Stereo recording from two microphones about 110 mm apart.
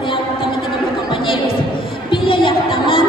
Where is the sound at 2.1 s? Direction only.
50° left (ahead or behind).